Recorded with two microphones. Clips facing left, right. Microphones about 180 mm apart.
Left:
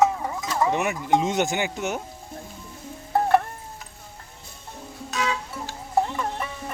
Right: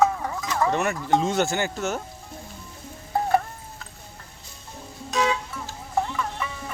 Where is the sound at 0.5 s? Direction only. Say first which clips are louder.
Even; 15° left (ahead or behind).